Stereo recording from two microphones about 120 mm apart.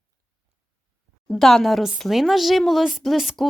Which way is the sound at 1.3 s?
5° left (ahead or behind).